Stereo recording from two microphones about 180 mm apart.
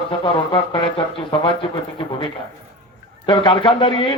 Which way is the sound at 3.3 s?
25° left (ahead or behind).